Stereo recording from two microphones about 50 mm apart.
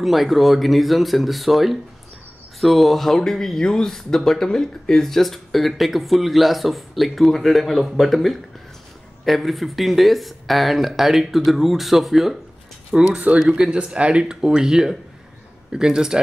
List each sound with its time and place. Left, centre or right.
0.0 s speech: centre
12.9 s speech: centre